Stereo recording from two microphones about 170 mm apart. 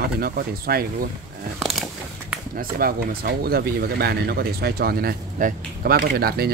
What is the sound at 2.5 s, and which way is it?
Speech, 60° right (ahead or behind).